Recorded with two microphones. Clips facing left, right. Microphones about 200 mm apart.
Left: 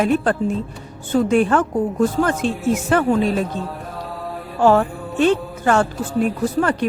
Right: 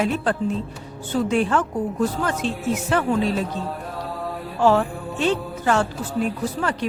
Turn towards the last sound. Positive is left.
turn(degrees=50)  # may be behind; listen again after turning